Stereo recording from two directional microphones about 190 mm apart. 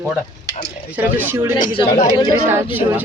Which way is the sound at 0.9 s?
10° right (ahead or behind).